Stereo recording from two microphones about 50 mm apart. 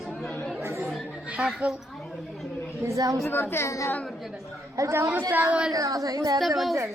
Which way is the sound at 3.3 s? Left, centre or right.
Left.